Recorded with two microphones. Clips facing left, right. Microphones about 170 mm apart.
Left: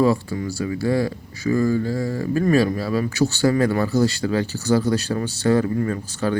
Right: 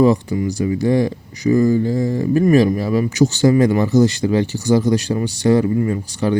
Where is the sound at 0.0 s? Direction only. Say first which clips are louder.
Right 5 dB; 20° right (ahead or behind).